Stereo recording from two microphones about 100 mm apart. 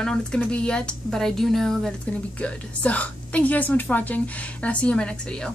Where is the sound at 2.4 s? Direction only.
15° left (ahead or behind).